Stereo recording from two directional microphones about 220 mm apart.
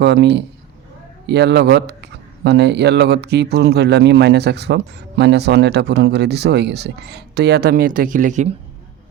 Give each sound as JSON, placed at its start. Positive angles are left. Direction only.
{"t": 0.0, "sound": "speech", "side_deg": -50}